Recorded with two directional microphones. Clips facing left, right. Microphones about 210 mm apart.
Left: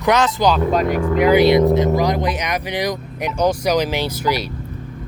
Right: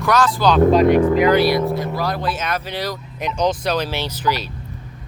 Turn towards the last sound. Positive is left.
turn(degrees=15)  # may be behind; listen again after turning